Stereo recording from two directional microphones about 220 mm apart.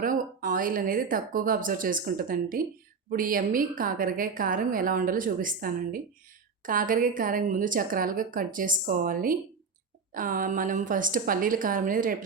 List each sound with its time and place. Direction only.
0.0 s a woman's voice: 40° right (ahead or behind)